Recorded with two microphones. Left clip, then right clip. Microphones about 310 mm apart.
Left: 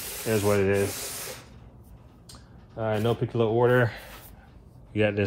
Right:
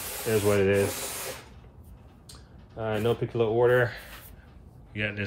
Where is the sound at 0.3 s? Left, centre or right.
Centre.